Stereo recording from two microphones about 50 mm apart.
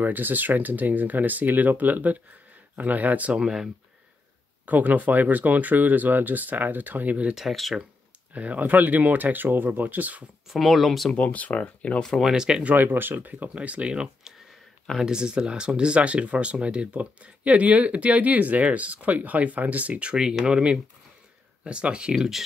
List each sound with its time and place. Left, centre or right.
0.0 s speech: right
3.3 s speech: centre
4.6 s speech: right
7.3 s speech: centre
8.3 s speech: right
10.5 s speech: centre
11.1 s speech: left
12.2 s speech: centre
12.7 s speech: right